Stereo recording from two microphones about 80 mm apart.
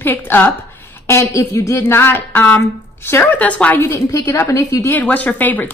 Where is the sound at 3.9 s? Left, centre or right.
Left.